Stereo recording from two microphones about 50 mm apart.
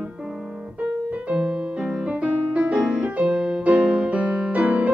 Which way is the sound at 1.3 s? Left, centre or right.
Right.